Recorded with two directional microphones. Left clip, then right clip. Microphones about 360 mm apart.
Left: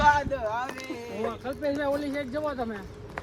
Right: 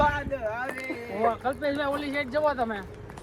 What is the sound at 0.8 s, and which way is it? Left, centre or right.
Speech, centre.